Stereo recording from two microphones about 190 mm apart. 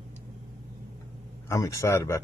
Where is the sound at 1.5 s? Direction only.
15° left (ahead or behind).